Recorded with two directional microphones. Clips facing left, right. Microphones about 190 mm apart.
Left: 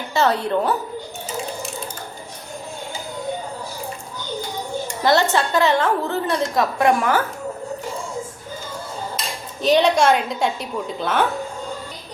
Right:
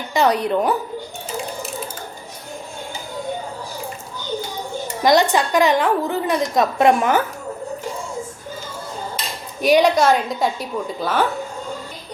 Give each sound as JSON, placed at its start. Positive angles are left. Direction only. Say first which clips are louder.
{"t": 0.1, "sound": "a woman's voice", "louder": "right 2 dB", "side_deg": -15}
{"t": 5.0, "sound": "a woman's voice", "louder": "right 2 dB", "side_deg": -15}
{"t": 9.6, "sound": "a woman's voice", "louder": "right 1 dB", "side_deg": -10}